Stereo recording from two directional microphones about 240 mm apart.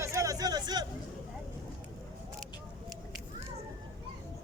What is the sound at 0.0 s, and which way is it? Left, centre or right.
Hubbub, centre.